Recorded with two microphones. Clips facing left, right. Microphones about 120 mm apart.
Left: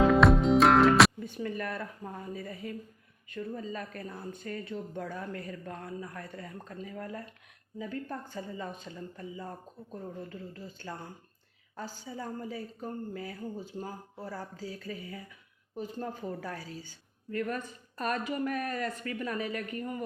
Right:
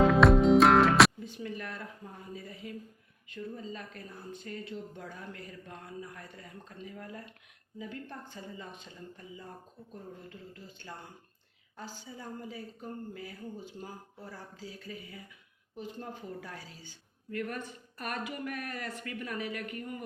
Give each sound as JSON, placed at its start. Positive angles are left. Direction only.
{"t": 0.1, "sound": "music", "side_deg": 0}
{"t": 1.2, "sound": "a sound", "side_deg": 50}
{"t": 2.3, "sound": "speech", "side_deg": 50}
{"t": 9.9, "sound": "speech", "side_deg": 40}